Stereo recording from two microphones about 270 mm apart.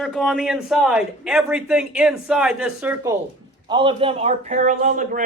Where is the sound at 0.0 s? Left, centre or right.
Centre.